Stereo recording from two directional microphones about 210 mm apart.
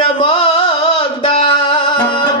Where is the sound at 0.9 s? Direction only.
25° left (ahead or behind).